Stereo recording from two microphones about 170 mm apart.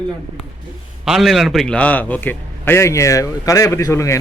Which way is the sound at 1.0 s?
Centre (ahead or behind).